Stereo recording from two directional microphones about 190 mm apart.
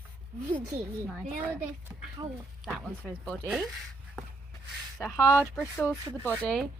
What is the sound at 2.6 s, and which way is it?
Speech, centre (ahead or behind).